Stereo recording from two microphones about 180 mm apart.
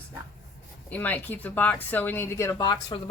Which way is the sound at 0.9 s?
10° left (ahead or behind).